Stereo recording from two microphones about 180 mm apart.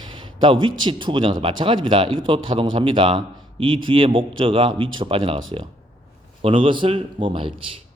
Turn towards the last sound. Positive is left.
turn(degrees=-30)  # may be behind; listen again after turning